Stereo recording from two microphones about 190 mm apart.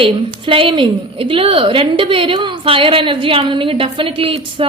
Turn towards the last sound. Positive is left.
turn(degrees=-30)  # may be behind; listen again after turning